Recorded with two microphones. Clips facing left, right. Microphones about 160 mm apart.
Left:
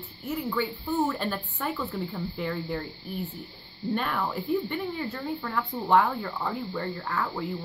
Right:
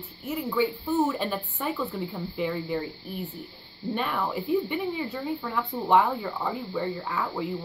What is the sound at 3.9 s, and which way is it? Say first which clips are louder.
Speech: right 1 dB; 5° right (ahead or behind).